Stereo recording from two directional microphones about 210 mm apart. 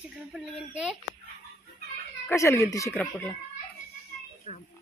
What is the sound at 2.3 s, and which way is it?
Speech, 15° left (ahead or behind).